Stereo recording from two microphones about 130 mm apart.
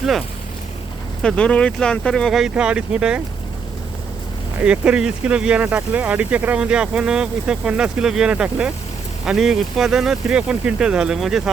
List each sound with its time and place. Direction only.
1.2 s speech: 5° left (ahead or behind)
4.6 s speech: 10° right (ahead or behind)